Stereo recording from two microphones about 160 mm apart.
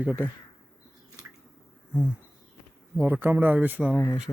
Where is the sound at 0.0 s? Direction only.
5° right (ahead or behind).